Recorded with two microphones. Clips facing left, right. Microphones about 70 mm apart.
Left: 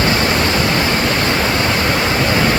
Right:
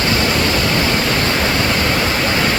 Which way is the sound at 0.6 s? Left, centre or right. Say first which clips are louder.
Left 1 dB; centre.